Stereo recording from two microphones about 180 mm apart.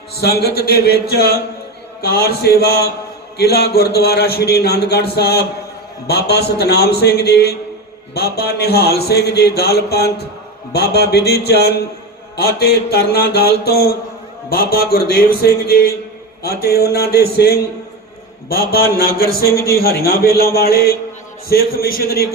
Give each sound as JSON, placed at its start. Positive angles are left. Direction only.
{"t": 0.2, "sound": "a man's voice", "side_deg": 60}